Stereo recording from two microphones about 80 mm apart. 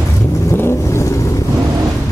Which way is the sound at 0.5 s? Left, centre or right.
Left.